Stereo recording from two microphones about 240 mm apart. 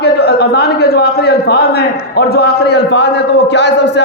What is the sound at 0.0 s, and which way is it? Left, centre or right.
A man's voice, left.